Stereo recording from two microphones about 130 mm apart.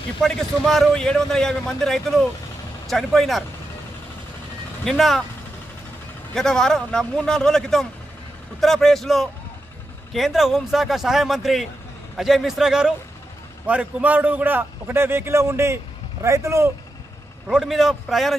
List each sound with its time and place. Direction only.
0.2 s a man's voice: centre (ahead or behind)
4.8 s a man's voice: centre (ahead or behind)
6.3 s a man's voice: 5° left (ahead or behind); by 16.7 s 20° right (ahead or behind)
17.5 s a man's voice: 5° right (ahead or behind)